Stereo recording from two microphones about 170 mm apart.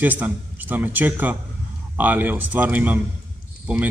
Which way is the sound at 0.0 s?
10° right (ahead or behind).